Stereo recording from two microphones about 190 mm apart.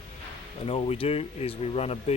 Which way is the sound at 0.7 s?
30° left (ahead or behind).